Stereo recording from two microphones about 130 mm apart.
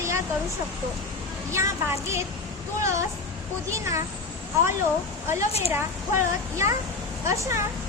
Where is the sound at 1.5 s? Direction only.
20° right (ahead or behind).